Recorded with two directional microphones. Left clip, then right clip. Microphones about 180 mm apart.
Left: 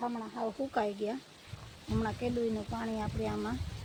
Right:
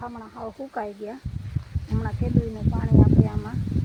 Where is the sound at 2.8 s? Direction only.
Centre (ahead or behind).